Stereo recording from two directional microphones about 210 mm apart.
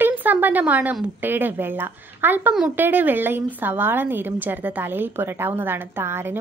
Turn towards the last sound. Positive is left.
turn(degrees=-10)  # may be behind; listen again after turning